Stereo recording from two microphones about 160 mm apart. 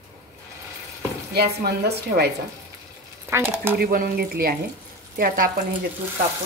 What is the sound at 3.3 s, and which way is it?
Speech, 15° right (ahead or behind).